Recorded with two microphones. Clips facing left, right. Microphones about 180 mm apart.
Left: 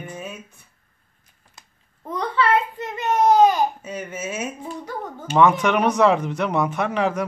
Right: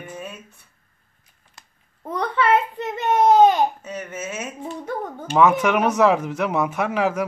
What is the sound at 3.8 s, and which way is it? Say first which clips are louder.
Speech: left 1 dB; 10° left (ahead or behind).